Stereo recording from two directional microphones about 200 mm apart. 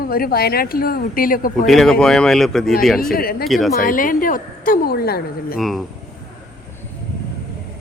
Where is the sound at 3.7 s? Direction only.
45° left (ahead or behind).